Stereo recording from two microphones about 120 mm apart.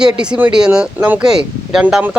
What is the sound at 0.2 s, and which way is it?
Speech, 10° right (ahead or behind).